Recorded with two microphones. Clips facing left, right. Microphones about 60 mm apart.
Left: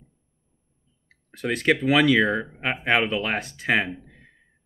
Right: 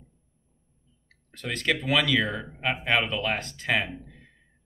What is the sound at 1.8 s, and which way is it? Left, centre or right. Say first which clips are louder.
Speech: left 6 dB; centre.